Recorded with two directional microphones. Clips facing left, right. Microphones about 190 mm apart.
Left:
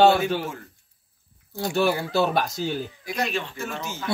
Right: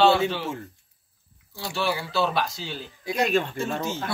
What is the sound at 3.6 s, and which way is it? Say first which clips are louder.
Speech: right 4 dB; 30° right (ahead or behind).